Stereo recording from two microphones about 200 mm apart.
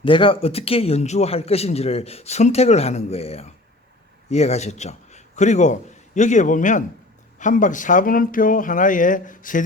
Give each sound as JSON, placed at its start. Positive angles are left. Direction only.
{"t": 0.0, "sound": "a man's voice", "side_deg": 25}